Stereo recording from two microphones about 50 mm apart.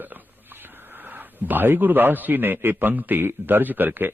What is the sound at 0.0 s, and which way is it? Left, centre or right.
A man's voice, right.